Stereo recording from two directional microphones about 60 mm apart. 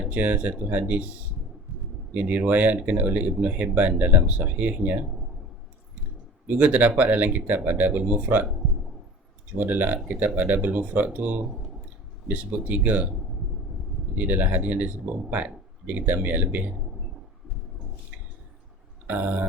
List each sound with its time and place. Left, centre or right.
0.1 s speech: right
2.1 s speech: right
6.5 s speech: right
9.6 s speech: right
14.2 s speech: right
19.0 s a sound: right